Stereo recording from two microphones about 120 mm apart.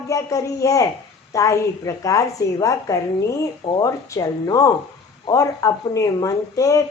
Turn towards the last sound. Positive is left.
turn(degrees=25)  # may be behind; listen again after turning